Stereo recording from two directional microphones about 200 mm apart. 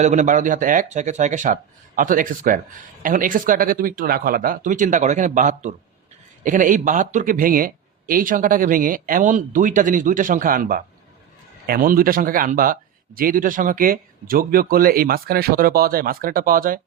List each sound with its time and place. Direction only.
0.0 s speech: 35° right (ahead or behind)